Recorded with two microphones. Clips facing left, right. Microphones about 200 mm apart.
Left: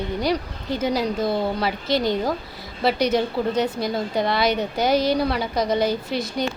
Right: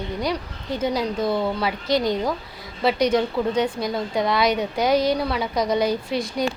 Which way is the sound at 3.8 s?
30° left (ahead or behind).